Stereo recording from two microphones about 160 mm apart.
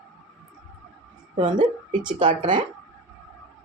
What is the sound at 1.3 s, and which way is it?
A woman's voice, 30° right (ahead or behind).